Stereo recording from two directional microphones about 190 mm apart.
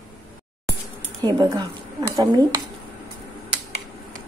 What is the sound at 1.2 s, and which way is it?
Speech, 20° right (ahead or behind).